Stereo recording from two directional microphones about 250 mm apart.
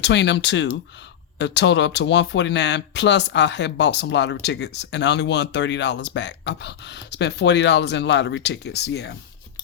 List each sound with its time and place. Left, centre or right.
0.0 s speech: left